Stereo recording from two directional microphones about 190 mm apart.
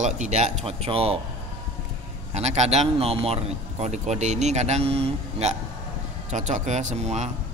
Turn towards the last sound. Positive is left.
turn(degrees=-35)  # may be behind; listen again after turning